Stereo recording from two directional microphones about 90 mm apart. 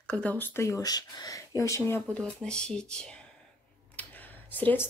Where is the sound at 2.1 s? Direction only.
10° left (ahead or behind).